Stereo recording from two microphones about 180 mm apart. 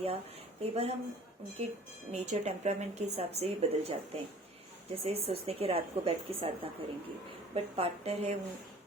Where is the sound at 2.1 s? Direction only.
35° right (ahead or behind).